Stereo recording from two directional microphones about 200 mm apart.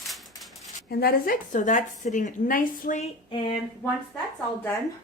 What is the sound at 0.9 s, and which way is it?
A woman's voice, 50° left (ahead or behind).